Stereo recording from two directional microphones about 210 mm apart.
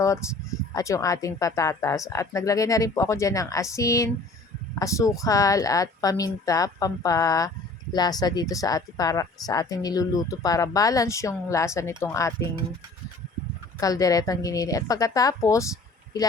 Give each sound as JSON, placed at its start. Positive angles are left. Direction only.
{"t": 0.0, "sound": "speech", "side_deg": 15}
{"t": 13.7, "sound": "speech", "side_deg": 15}